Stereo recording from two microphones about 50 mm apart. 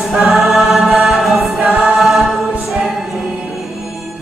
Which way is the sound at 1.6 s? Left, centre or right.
Right.